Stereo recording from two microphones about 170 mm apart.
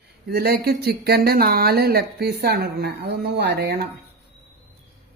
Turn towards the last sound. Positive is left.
turn(degrees=-90)